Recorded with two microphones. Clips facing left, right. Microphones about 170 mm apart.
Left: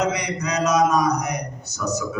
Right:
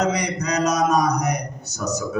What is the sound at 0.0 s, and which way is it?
A man's voice, 40° right (ahead or behind).